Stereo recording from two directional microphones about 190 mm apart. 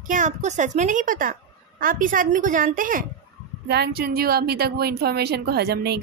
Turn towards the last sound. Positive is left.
turn(degrees=-60)  # may be behind; listen again after turning